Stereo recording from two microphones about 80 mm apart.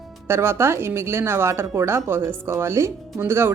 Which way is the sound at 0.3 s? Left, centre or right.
Right.